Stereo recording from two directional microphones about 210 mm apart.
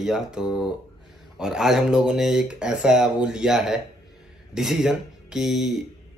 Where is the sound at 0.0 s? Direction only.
Centre (ahead or behind).